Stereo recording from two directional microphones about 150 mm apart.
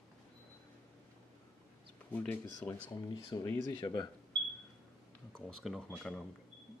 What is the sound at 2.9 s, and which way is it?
Speech, 30° left (ahead or behind).